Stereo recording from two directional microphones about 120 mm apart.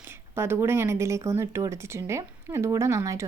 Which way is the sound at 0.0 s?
20° right (ahead or behind).